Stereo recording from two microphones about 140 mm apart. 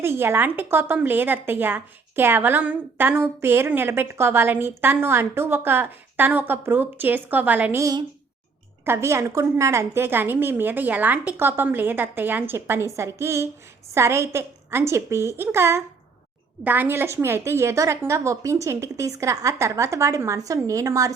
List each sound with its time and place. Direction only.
0.0 s a woman's voice: 15° right (ahead or behind)